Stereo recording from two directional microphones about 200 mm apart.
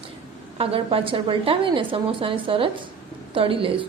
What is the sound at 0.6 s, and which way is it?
A woman's voice, 30° right (ahead or behind).